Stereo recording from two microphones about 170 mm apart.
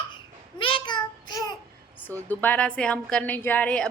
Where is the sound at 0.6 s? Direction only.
30° left (ahead or behind).